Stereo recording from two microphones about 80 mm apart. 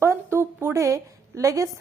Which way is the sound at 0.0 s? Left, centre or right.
Right.